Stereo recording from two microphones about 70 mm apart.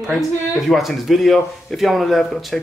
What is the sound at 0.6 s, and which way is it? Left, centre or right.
Speech, centre.